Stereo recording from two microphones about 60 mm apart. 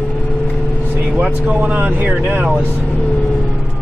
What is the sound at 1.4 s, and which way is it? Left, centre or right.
Speech, right.